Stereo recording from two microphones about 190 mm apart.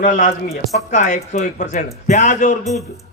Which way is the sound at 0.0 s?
45° left (ahead or behind).